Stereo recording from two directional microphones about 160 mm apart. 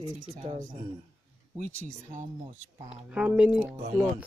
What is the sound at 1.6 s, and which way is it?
Speech, 45° right (ahead or behind).